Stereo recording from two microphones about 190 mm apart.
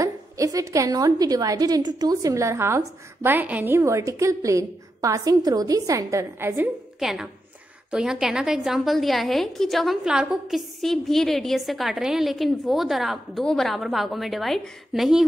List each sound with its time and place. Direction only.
0.0 s a woman's voice: 15° right (ahead or behind); by 15.2 s centre (ahead or behind)